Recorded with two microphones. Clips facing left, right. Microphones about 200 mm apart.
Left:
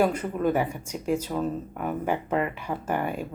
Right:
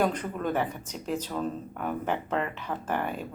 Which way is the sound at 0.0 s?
10° left (ahead or behind).